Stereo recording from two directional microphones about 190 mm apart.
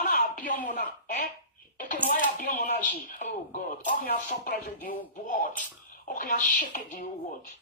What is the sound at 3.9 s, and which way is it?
Speech, 45° left (ahead or behind).